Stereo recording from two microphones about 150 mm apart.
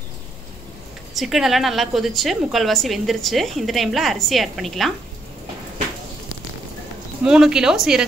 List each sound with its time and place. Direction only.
1.1 s a woman's voice: centre (ahead or behind)
7.2 s a woman's voice: 5° right (ahead or behind)